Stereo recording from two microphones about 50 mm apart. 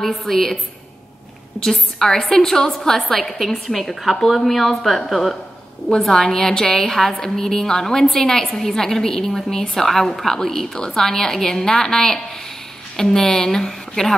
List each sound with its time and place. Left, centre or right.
0.0 s a woman's voice: centre
1.6 s a woman's voice: centre